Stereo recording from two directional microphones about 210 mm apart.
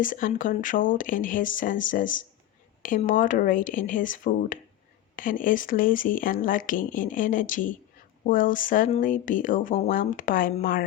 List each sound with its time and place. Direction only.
0.0 s speech: 40° left (ahead or behind)